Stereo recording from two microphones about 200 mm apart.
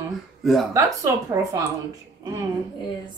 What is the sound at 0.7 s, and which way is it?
Speech, 15° right (ahead or behind).